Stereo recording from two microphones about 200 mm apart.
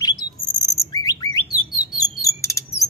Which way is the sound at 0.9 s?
20° left (ahead or behind).